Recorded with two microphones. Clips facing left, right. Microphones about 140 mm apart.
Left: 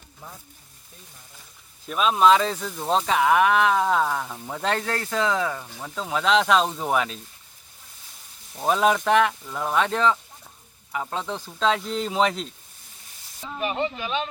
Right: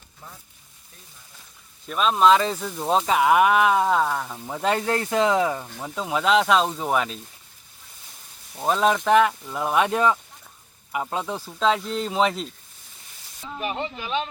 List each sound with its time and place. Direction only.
1.9 s speech: centre (ahead or behind)
4.9 s speech: 20° right (ahead or behind)
5.8 s speech: 10° right (ahead or behind)
8.5 s speech: 5° left (ahead or behind)